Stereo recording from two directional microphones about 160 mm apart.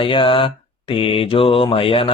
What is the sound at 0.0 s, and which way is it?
Mantra, 35° left (ahead or behind).